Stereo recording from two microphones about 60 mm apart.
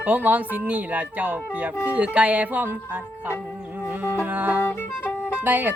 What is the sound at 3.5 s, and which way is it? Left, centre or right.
Music, right.